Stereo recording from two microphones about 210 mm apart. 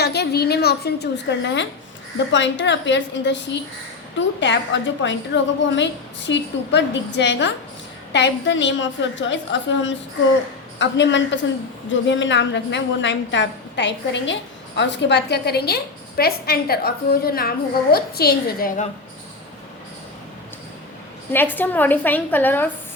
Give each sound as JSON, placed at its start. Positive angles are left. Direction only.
{"t": 0.0, "sound": "a woman's voice", "side_deg": 50}
{"t": 21.3, "sound": "a woman's voice", "side_deg": 10}